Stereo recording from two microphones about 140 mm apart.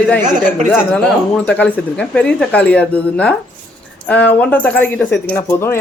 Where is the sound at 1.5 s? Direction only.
10° left (ahead or behind).